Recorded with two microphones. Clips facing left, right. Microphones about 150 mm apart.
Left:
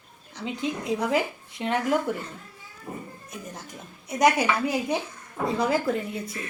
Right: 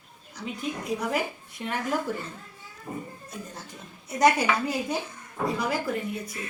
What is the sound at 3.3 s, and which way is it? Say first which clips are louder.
Speech: left 1 dB; 15° left (ahead or behind).